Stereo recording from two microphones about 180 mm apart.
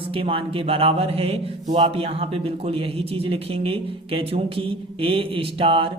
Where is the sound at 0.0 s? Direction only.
30° right (ahead or behind).